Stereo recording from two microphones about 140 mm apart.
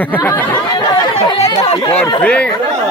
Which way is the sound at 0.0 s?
10° left (ahead or behind).